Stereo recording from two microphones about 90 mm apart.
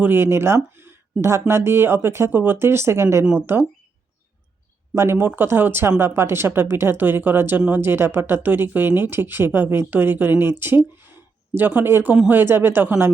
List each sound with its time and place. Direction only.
0.0 s speech: 25° right (ahead or behind)
4.9 s speech: 30° right (ahead or behind)